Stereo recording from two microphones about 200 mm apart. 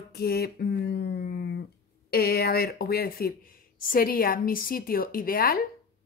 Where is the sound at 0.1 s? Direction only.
50° left (ahead or behind).